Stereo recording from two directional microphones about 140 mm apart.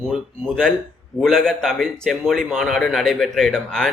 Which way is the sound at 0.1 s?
5° left (ahead or behind).